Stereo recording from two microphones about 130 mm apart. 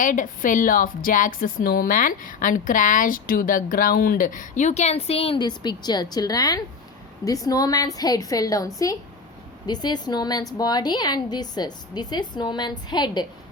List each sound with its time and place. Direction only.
0.0 s a woman's voice: 90° left; by 5.4 s 50° left (ahead or behind)
5.4 s a woman's voice: 35° left (ahead or behind)